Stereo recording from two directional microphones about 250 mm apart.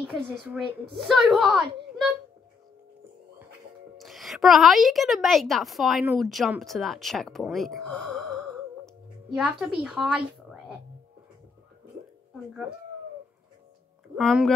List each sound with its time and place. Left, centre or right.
0.0 s a woman's voice: centre
4.0 s a woman's voice: centre
14.1 s a woman's voice: centre